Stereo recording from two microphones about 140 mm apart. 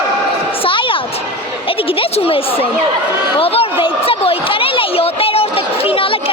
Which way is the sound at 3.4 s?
45° left (ahead or behind).